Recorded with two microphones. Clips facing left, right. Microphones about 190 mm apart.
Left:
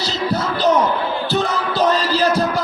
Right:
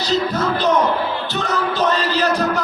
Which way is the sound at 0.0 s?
35° left (ahead or behind).